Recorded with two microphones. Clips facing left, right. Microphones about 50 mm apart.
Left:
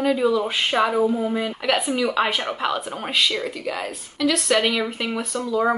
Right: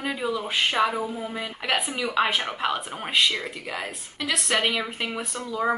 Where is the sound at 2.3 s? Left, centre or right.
Centre.